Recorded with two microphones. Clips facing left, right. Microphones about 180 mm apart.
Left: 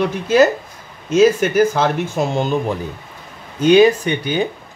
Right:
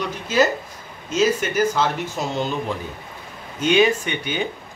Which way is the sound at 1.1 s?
55° left (ahead or behind).